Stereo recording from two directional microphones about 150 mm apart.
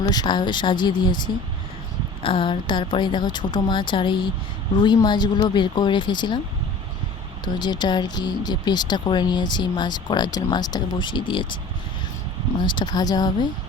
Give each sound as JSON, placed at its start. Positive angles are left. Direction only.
{"t": 0.0, "sound": "speech", "side_deg": 25}
{"t": 2.2, "sound": "a woman's voice", "side_deg": 35}
{"t": 7.4, "sound": "speech", "side_deg": 30}
{"t": 12.5, "sound": "speech", "side_deg": 30}